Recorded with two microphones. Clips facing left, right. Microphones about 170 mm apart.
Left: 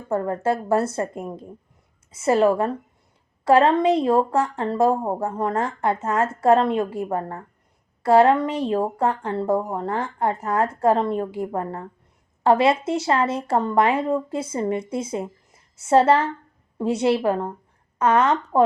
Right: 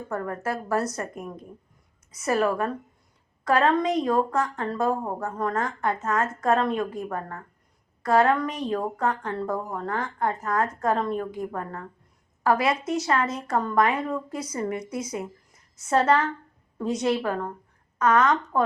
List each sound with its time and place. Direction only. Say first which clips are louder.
0.1 s speech: left 8 dB; 25° left (ahead or behind)